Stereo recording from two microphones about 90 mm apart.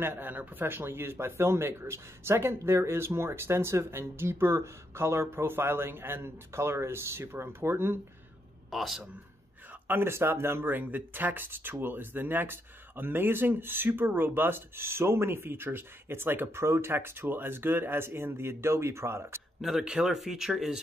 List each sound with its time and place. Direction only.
0.0 s speech: 20° right (ahead or behind)
8.6 s speech: centre (ahead or behind)
9.8 s speech: 25° right (ahead or behind)
19.6 s speech: 5° right (ahead or behind)